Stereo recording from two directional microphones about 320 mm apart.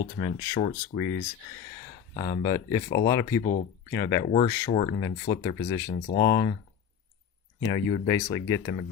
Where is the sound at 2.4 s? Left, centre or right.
Centre.